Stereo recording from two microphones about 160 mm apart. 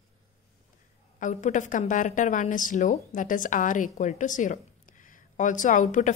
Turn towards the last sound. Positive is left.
turn(degrees=50)  # may be behind; listen again after turning